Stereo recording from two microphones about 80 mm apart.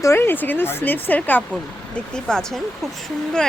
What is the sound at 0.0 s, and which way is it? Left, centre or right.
Speech, left.